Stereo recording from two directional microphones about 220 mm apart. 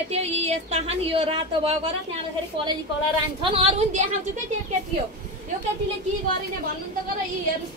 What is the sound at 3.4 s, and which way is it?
Speech, 25° right (ahead or behind).